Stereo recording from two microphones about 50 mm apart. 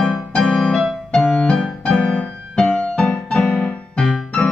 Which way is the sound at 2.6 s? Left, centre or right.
Centre.